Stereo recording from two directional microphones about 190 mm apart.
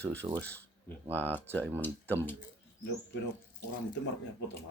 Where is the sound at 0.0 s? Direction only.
10° left (ahead or behind).